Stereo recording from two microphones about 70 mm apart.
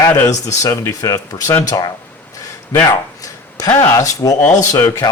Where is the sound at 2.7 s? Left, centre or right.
Left.